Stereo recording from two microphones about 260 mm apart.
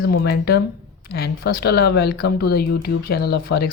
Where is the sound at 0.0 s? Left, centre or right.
Left.